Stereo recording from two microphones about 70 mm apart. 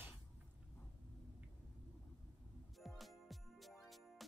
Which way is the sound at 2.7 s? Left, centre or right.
Centre.